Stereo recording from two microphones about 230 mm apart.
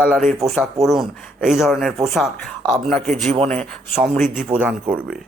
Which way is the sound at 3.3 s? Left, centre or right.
Right.